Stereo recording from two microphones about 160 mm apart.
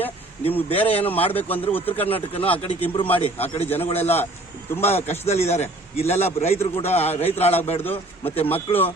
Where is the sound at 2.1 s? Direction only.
40° left (ahead or behind).